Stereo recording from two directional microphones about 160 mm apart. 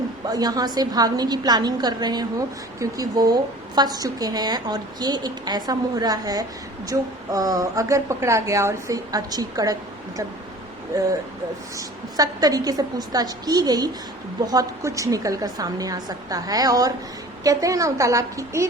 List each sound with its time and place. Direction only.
0.3 s a woman's voice: 25° right (ahead or behind)
11.8 s a woman's voice: 25° right (ahead or behind)